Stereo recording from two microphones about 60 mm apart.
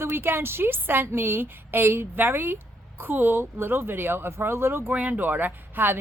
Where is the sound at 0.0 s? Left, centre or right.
Right.